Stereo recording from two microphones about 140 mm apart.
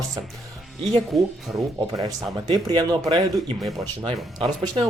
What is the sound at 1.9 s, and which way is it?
Speech, 30° right (ahead or behind).